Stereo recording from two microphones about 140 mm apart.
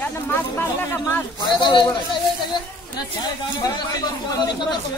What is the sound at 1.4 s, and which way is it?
Speech, 35° left (ahead or behind).